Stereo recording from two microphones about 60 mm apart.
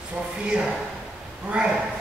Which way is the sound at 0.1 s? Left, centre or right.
Centre.